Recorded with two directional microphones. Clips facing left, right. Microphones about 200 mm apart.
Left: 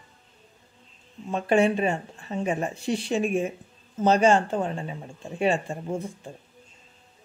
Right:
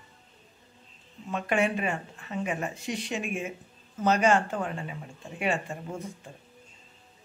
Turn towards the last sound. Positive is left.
turn(degrees=30)  # may be behind; listen again after turning